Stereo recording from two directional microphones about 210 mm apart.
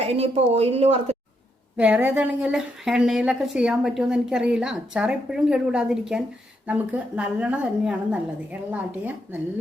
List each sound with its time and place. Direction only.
0.0 s a woman's voice: 30° right (ahead or behind)
1.7 s a woman's voice: 5° right (ahead or behind)